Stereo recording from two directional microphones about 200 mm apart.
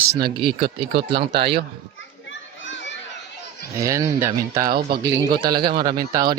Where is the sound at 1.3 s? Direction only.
55° right (ahead or behind).